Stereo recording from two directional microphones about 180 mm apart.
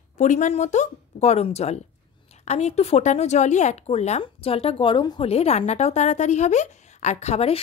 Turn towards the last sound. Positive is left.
turn(degrees=35)  # may be behind; listen again after turning